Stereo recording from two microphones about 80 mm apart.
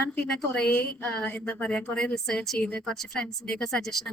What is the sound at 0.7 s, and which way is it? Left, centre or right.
A woman's voice, left.